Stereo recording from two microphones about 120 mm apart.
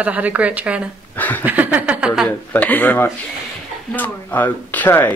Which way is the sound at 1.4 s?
15° right (ahead or behind).